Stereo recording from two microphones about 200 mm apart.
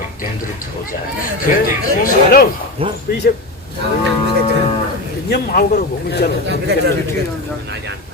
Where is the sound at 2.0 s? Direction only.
45° left (ahead or behind).